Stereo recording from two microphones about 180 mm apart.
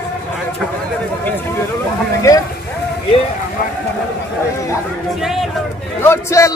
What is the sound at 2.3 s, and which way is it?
Speech, 15° left (ahead or behind).